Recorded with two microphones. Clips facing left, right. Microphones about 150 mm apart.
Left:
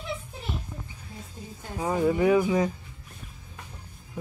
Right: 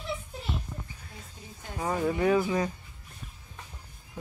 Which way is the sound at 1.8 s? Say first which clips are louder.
Left 4 dB; 15° left (ahead or behind).